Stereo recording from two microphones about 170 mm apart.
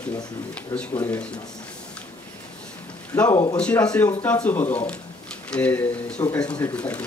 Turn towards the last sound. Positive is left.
turn(degrees=10)  # may be behind; listen again after turning